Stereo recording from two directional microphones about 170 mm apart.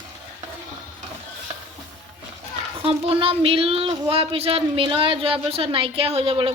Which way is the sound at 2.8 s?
35° right (ahead or behind).